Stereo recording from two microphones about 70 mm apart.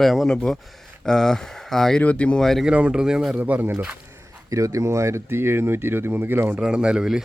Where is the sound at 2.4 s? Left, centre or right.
Centre.